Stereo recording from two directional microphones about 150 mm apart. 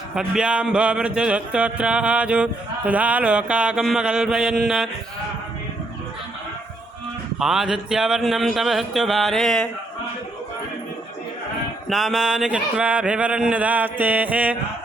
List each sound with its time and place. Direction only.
0.2 s music: 5° right (ahead or behind)
7.3 s speech: 5° right (ahead or behind)
11.9 s music: centre (ahead or behind)